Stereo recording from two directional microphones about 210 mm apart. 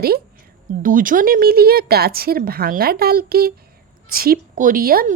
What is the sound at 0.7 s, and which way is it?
Speech, 40° right (ahead or behind).